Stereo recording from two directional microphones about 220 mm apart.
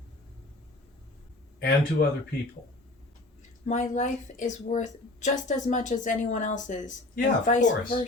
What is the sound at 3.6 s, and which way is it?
Speech, 30° left (ahead or behind).